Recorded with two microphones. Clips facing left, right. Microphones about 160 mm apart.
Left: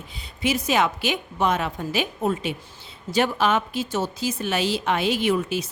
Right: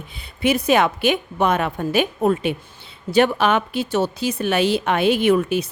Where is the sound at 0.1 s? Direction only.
60° right (ahead or behind).